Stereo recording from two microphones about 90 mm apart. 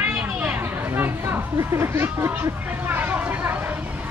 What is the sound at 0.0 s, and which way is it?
Chatter, 15° right (ahead or behind).